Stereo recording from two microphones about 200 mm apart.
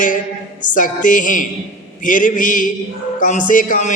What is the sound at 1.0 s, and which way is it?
Music, 40° left (ahead or behind).